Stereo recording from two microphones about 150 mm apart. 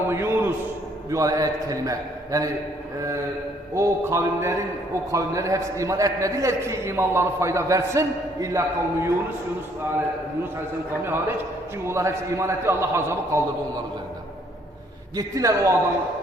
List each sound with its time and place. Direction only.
0.1 s a man's voice: 15° right (ahead or behind)
3.8 s a man's voice: 20° right (ahead or behind)
11.0 s a man's voice: 15° right (ahead or behind)
15.1 s a man's voice: 25° right (ahead or behind)